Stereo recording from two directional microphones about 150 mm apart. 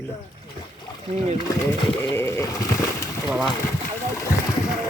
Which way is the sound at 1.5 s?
15° left (ahead or behind).